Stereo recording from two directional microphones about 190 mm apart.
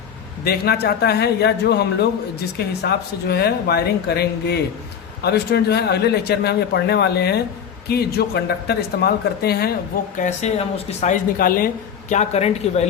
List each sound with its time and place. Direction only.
0.4 s speech: 55° left (ahead or behind)
11.0 s speech: 45° left (ahead or behind)